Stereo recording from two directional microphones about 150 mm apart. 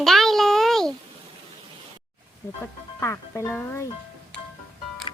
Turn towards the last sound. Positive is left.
turn(degrees=15)  # may be behind; listen again after turning